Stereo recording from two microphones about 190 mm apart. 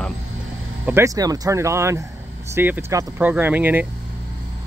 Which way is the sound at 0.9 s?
15° right (ahead or behind).